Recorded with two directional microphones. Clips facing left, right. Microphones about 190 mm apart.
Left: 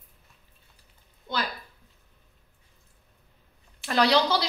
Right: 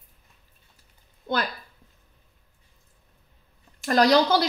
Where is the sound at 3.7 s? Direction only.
45° right (ahead or behind).